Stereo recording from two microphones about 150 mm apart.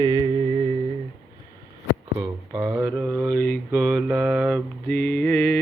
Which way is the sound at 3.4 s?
5° left (ahead or behind).